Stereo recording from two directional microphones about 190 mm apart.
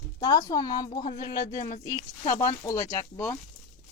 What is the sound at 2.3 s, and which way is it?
Speech, 20° left (ahead or behind).